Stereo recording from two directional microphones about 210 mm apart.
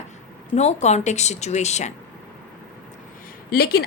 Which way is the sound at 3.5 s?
45° left (ahead or behind).